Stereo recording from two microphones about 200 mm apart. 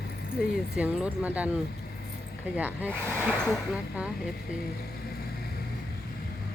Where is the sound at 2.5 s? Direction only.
10° right (ahead or behind).